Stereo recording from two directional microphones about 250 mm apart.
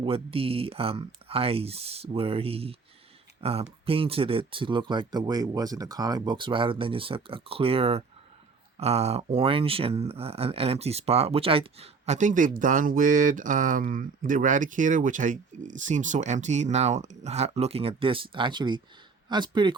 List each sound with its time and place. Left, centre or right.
0.0 s speech: right